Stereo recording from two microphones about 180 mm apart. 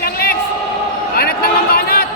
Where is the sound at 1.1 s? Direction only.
55° left (ahead or behind).